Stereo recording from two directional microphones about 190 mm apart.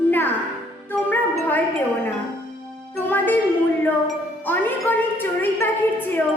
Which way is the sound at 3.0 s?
10° left (ahead or behind).